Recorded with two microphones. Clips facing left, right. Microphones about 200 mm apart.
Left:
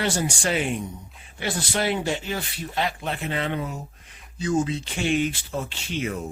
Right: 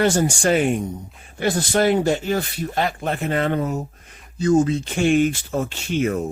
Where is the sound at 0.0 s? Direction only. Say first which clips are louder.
Right 7 dB; 45° right (ahead or behind).